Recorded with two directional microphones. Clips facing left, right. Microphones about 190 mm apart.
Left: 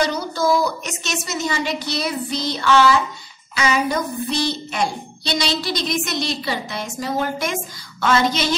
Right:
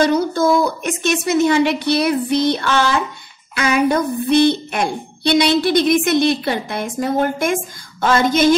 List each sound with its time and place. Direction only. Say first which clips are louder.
0.0 s a woman's voice: right 6 dB; 55° right (ahead or behind)